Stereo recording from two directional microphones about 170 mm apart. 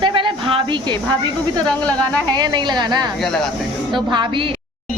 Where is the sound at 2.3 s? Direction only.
25° right (ahead or behind).